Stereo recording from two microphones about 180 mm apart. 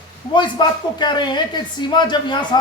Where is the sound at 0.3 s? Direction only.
25° left (ahead or behind).